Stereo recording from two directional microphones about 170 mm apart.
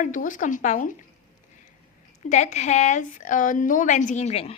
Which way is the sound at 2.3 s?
45° left (ahead or behind).